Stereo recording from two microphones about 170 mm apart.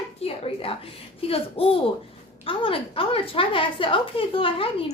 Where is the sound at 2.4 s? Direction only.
30° left (ahead or behind).